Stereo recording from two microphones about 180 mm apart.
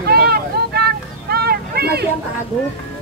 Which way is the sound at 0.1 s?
60° right (ahead or behind).